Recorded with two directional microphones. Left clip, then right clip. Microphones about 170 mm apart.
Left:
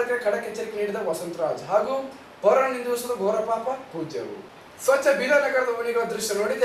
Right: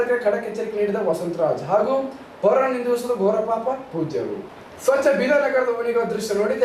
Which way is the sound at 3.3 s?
25° right (ahead or behind).